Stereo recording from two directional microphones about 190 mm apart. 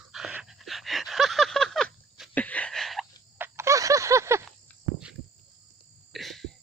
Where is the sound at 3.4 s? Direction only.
15° right (ahead or behind).